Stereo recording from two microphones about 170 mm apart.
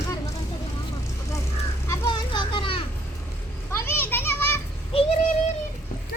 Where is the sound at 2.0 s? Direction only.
30° left (ahead or behind).